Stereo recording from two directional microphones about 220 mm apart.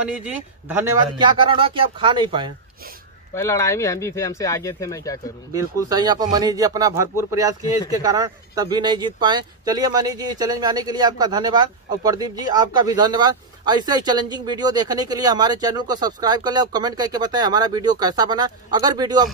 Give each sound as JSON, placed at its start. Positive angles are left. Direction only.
{"t": 0.1, "sound": "speech", "side_deg": -10}
{"t": 3.3, "sound": "speech", "side_deg": 15}
{"t": 5.5, "sound": "speech", "side_deg": -15}